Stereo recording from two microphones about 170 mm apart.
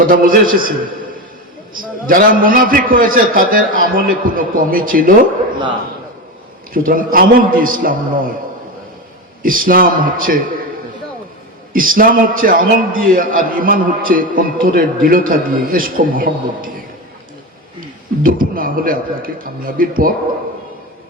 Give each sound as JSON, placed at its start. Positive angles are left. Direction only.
{"t": 0.0, "sound": "a man's voice", "side_deg": -55}
{"t": 6.7, "sound": "a man's voice", "side_deg": -55}
{"t": 9.4, "sound": "a man's voice", "side_deg": -55}
{"t": 11.7, "sound": "a man's voice", "side_deg": -55}
{"t": 18.2, "sound": "a man's voice", "side_deg": -55}